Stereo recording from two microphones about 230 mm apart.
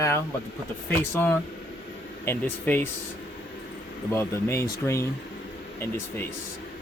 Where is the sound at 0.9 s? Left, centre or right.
Centre.